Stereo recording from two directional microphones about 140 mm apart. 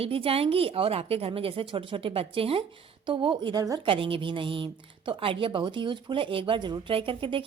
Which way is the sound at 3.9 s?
40° right (ahead or behind).